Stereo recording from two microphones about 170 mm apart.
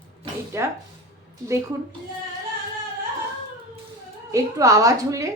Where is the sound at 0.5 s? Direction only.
15° right (ahead or behind).